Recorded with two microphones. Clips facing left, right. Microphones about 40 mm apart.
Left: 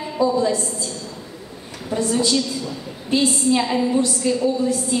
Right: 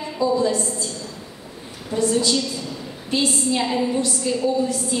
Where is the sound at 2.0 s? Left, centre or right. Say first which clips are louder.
Even; left.